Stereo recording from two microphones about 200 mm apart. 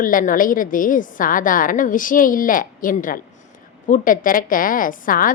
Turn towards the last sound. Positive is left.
turn(degrees=45)  # may be behind; listen again after turning